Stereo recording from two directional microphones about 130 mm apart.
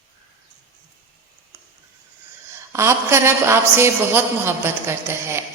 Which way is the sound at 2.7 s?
20° right (ahead or behind).